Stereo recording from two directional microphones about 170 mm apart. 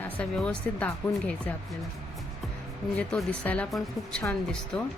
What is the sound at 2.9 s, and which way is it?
Speech, 5° left (ahead or behind).